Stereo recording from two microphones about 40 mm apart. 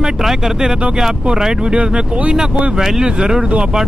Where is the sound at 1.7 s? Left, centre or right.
Right.